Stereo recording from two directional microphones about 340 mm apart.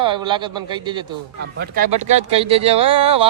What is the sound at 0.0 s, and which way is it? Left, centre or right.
Speech, centre.